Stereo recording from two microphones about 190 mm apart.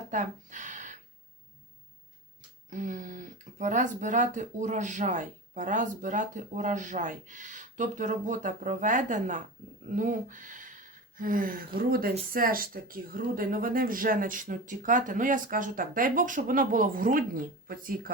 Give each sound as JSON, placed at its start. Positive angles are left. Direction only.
{"t": 0.1, "sound": "speech", "side_deg": -40}
{"t": 2.6, "sound": "speech", "side_deg": -40}